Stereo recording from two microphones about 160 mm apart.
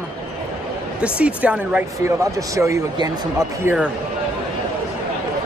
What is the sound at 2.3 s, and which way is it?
Speech, 20° right (ahead or behind).